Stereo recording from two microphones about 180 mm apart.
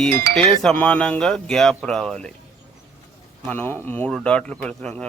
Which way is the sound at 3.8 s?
10° left (ahead or behind).